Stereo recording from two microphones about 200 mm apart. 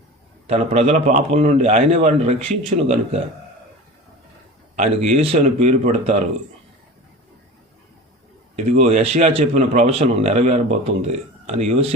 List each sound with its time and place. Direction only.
0.4 s a man's voice: 30° right (ahead or behind)
5.1 s a man's voice: 30° right (ahead or behind)
8.5 s a man's voice: 30° right (ahead or behind)